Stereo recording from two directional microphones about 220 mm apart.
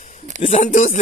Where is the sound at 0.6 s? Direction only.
35° left (ahead or behind).